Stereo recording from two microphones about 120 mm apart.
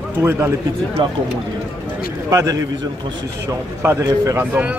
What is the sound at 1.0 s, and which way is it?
Speech, 45° right (ahead or behind).